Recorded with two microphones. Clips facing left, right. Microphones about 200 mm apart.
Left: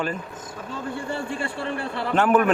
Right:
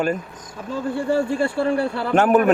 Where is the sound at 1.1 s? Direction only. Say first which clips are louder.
Right 9 dB; 40° right (ahead or behind).